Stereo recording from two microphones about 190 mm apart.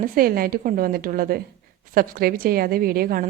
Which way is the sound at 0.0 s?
50° right (ahead or behind).